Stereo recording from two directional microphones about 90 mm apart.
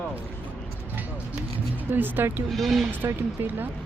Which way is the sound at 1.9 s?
20° right (ahead or behind).